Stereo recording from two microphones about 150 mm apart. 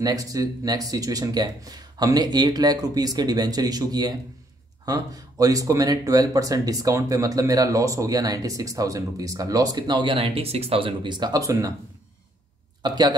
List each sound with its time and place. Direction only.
0.0 s speech: 25° right (ahead or behind)
12.8 s speech: 30° right (ahead or behind)